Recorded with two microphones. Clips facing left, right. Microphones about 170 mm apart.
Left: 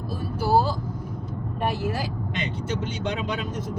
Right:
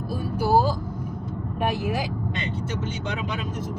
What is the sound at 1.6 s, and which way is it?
Speech, 15° right (ahead or behind).